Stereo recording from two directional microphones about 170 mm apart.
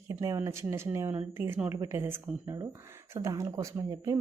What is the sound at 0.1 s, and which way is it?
Speech, 20° right (ahead or behind).